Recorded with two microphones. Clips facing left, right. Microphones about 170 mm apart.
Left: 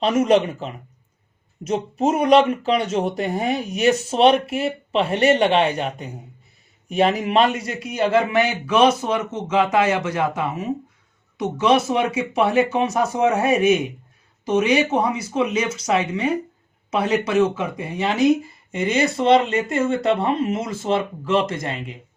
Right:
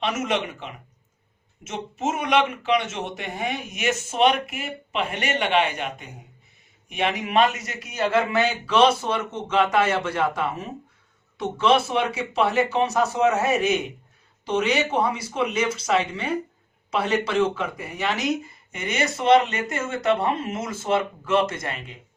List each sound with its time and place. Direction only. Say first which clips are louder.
0.0 s a man's voice: left 9 dB; 35° left (ahead or behind)
14.9 s speech: left 3 dB; 15° left (ahead or behind)
17.7 s speech: left 6 dB; 25° left (ahead or behind)